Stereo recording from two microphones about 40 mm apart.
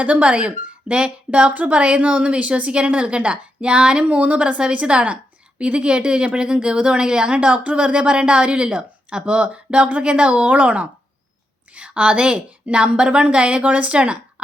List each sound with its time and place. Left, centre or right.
0.0 s speech: right
4.0 s speech: right; by 7.3 s centre
7.4 s a woman's voice: right